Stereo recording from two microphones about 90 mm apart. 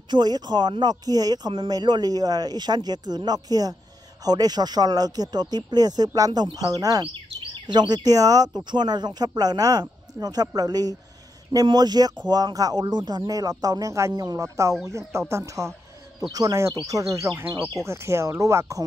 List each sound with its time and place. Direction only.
0.1 s speech: 50° right (ahead or behind)
7.5 s speech: 55° right (ahead or behind)
8.6 s speech: 55° right (ahead or behind); by 18.9 s 35° right (ahead or behind)